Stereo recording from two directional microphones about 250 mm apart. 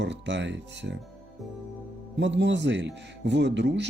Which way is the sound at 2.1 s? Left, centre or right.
Right.